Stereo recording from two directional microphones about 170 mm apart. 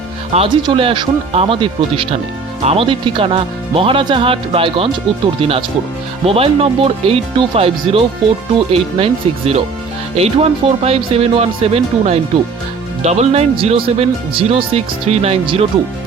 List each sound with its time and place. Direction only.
0.3 s speech: 30° right (ahead or behind)